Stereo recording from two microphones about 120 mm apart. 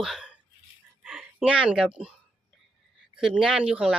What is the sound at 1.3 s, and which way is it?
Speech, 10° right (ahead or behind).